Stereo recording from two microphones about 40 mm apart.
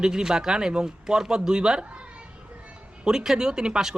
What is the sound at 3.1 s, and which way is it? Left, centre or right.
Speech, centre.